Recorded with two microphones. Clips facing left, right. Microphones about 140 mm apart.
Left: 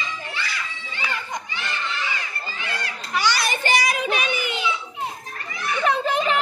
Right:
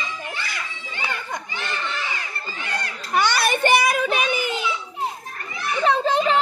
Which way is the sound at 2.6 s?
50° right (ahead or behind).